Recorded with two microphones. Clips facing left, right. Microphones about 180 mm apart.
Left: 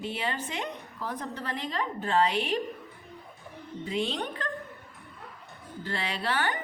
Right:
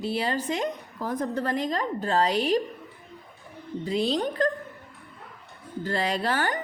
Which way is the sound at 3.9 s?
35° right (ahead or behind).